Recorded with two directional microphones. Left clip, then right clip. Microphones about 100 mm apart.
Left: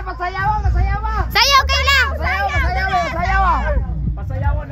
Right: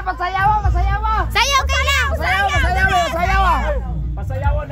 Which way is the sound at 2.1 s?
30° right (ahead or behind).